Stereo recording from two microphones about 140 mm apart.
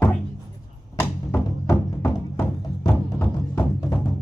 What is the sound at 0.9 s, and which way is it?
Music, 15° left (ahead or behind).